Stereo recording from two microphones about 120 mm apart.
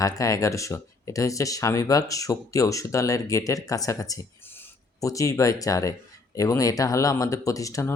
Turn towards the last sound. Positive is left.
turn(degrees=25)  # may be behind; listen again after turning